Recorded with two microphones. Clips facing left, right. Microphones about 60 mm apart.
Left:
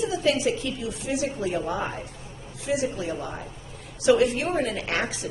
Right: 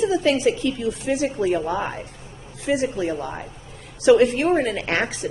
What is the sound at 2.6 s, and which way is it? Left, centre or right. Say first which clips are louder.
A woman's voice: right 5 dB; right.